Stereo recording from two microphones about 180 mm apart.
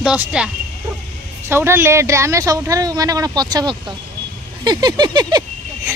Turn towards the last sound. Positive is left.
turn(degrees=-20)  # may be behind; listen again after turning